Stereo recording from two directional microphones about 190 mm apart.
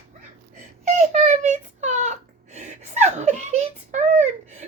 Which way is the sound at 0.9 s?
35° right (ahead or behind).